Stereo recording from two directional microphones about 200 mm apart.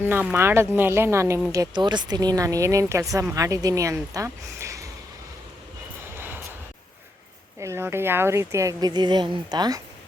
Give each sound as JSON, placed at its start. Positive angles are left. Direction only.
{"t": 0.0, "sound": "speech", "side_deg": -10}
{"t": 6.1, "sound": "vehicle", "side_deg": -10}
{"t": 7.6, "sound": "speech", "side_deg": -15}